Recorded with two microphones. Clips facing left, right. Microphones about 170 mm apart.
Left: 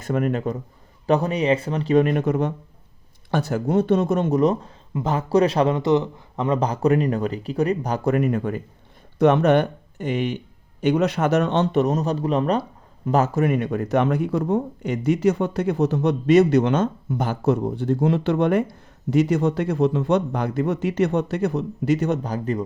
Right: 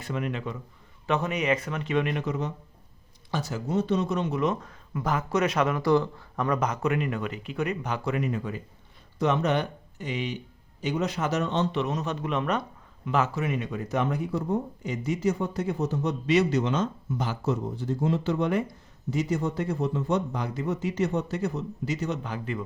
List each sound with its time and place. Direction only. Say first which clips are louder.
0.0 s speech: left 9 dB; 45° left (ahead or behind); by 11.8 s 65° left (ahead or behind)
11.8 s speech: left 8 dB; 40° left (ahead or behind)
13.4 s speech: left 9 dB; 55° left (ahead or behind)
16.3 s speech: left 8 dB; 55° left (ahead or behind)
22.2 s speech: left 7 dB; 40° left (ahead or behind)